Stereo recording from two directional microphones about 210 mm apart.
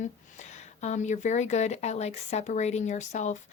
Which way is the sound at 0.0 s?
35° left (ahead or behind).